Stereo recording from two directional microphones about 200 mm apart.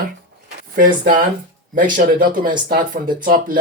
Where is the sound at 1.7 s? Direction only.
45° right (ahead or behind).